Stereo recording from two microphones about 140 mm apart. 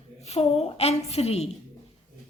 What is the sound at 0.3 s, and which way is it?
A woman's voice, 45° left (ahead or behind).